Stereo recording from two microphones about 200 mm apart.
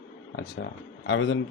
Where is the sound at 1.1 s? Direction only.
70° left (ahead or behind).